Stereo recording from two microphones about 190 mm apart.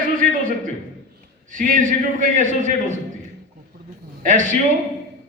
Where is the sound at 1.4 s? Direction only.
45° right (ahead or behind).